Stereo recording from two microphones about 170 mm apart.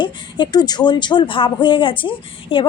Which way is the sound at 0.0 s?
25° left (ahead or behind).